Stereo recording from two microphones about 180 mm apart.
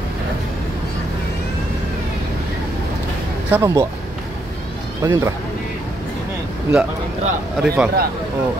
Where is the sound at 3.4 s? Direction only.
15° right (ahead or behind).